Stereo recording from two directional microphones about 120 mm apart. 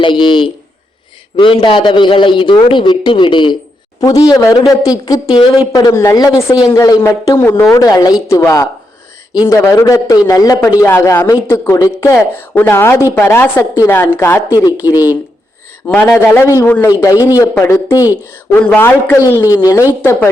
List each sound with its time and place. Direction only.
0.0 s a man's voice: 40° left (ahead or behind)
4.0 s a woman's voice: 30° left (ahead or behind)
14.8 s a woman's voice: 30° left (ahead or behind)
15.9 s a man's voice: 10° left (ahead or behind)
16.1 s speech: 20° left (ahead or behind)
18.5 s a man's voice: 15° left (ahead or behind)
20.0 s speech: 20° left (ahead or behind)